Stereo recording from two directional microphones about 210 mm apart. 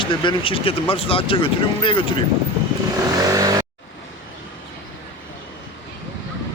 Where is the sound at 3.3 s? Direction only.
15° right (ahead or behind).